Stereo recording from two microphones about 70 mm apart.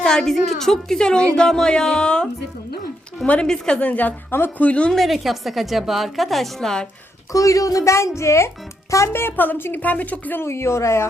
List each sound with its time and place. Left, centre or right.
0.0 s a woman's voice: centre
3.2 s a woman's voice: centre
4.9 s a woman's voice: centre
7.3 s a woman's voice: left
9.3 s a woman's voice: left
10.4 s speech: left